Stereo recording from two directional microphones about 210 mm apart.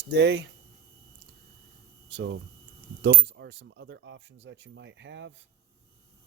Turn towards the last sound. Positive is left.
turn(degrees=-60)  # may be behind; listen again after turning